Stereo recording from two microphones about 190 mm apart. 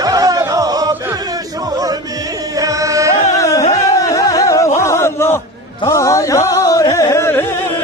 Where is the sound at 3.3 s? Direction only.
15° left (ahead or behind).